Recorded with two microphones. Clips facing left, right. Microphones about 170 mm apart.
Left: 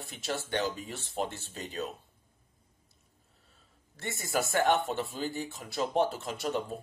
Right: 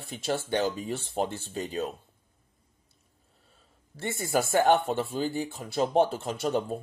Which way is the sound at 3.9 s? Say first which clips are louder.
Right 5 dB; 30° right (ahead or behind).